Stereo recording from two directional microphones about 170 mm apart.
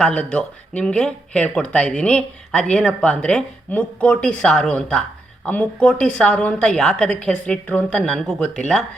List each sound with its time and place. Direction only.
0.0 s speech: 5° left (ahead or behind)